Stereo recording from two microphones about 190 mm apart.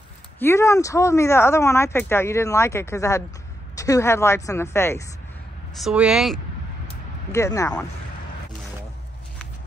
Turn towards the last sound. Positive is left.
turn(degrees=15)  # may be behind; listen again after turning